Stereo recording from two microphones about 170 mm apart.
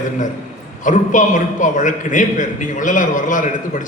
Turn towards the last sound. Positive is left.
turn(degrees=50)  # may be behind; listen again after turning